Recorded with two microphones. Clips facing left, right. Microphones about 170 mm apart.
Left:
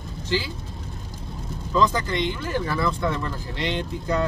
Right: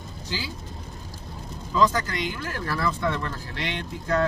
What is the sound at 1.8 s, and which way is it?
Speech, centre (ahead or behind).